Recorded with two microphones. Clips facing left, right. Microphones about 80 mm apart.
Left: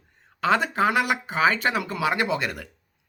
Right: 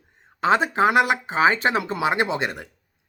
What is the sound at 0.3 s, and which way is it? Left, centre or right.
Speech, right.